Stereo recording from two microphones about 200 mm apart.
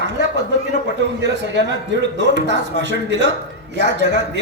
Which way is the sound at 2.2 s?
60° right (ahead or behind).